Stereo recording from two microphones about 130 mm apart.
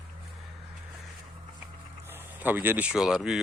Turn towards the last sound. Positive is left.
turn(degrees=-5)  # may be behind; listen again after turning